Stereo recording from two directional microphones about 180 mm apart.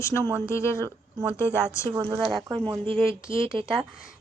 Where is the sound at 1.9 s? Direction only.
20° right (ahead or behind).